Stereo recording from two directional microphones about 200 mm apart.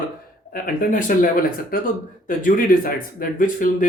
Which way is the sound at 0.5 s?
40° left (ahead or behind).